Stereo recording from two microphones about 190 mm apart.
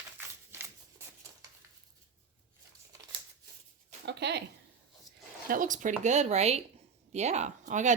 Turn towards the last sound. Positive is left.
turn(degrees=-40)  # may be behind; listen again after turning